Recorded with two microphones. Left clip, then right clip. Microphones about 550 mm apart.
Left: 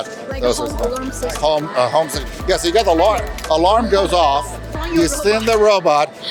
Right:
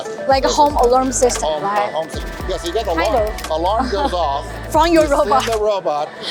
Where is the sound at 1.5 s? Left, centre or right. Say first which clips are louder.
Left 2 dB; left.